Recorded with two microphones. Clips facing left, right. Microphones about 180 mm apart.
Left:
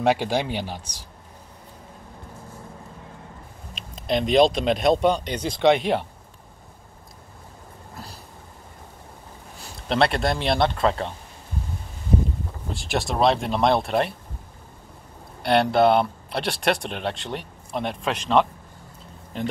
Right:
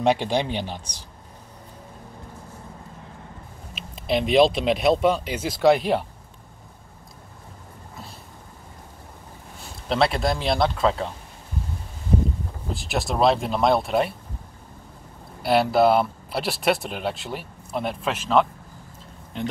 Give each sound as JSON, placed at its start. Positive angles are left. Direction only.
{"t": 0.0, "sound": "speech", "side_deg": 5}
{"t": 3.7, "sound": "speech", "side_deg": -5}
{"t": 7.9, "sound": "a sound", "side_deg": 0}
{"t": 9.8, "sound": "speech", "side_deg": 0}
{"t": 12.7, "sound": "speech", "side_deg": 0}
{"t": 15.4, "sound": "speech", "side_deg": -5}